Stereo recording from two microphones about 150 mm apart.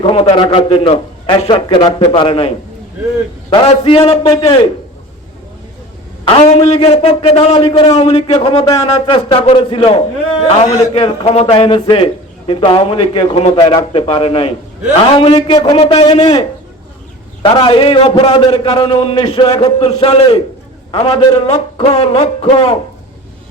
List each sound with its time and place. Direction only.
0.0 s a man's voice: 40° left (ahead or behind)
3.5 s a man's voice: 35° left (ahead or behind)
6.2 s a man's voice: 40° left (ahead or behind)
13.6 s a man's voice: 25° left (ahead or behind)
13.9 s a man's voice: 40° left (ahead or behind)
15.4 s a man's voice: 30° left (ahead or behind)